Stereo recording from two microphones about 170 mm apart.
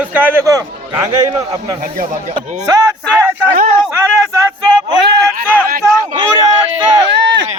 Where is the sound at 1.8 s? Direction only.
55° right (ahead or behind).